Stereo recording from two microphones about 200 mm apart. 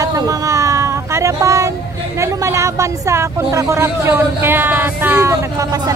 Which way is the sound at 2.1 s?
15° right (ahead or behind).